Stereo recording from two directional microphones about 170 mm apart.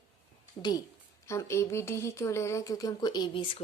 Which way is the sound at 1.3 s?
15° left (ahead or behind).